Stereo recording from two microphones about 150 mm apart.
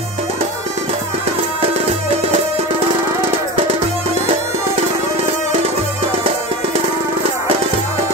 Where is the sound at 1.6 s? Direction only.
45° right (ahead or behind).